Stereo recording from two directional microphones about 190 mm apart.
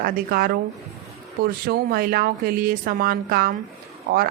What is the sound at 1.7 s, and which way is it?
A woman's voice, 55° right (ahead or behind).